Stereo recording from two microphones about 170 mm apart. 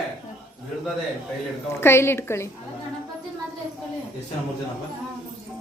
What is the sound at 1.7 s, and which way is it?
Speech, 15° left (ahead or behind).